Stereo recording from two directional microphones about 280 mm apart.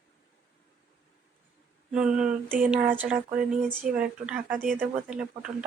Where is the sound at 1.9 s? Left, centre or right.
Centre.